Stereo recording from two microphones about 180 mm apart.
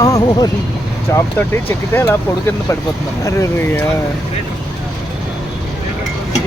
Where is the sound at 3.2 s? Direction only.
15° left (ahead or behind).